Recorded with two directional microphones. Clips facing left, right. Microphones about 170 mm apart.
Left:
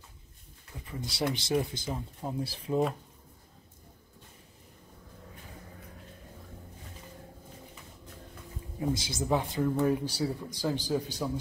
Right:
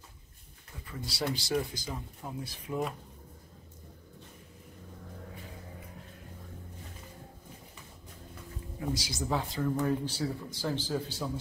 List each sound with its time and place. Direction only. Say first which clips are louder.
0.8 s speech: left 2 dB; 20° left (ahead or behind)
8.7 s speech: left 3 dB; 25° left (ahead or behind)